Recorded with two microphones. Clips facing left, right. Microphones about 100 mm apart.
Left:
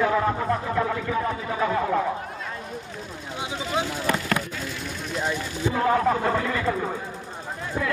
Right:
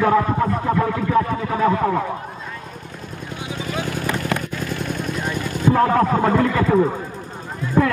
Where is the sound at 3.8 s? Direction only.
55° right (ahead or behind).